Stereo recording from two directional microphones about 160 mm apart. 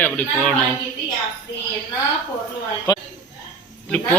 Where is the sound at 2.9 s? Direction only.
25° left (ahead or behind).